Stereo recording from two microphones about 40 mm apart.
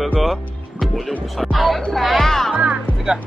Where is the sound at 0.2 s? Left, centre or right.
Centre.